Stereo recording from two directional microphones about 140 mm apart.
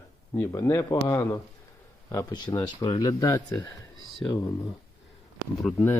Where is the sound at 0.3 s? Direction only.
20° left (ahead or behind).